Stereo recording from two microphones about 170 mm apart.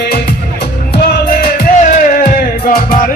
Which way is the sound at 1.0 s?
65° left (ahead or behind).